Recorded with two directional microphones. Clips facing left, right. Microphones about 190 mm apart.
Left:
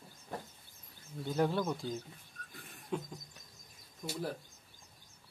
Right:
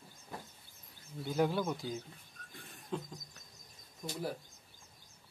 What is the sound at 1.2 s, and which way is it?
Speech, 5° right (ahead or behind).